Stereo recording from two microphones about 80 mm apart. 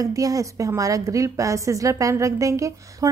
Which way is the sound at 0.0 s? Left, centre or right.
Right.